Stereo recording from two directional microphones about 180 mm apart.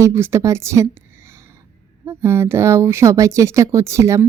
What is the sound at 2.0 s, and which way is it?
A woman's voice, 15° right (ahead or behind).